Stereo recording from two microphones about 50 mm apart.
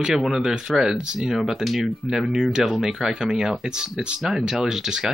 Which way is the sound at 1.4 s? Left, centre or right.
Centre.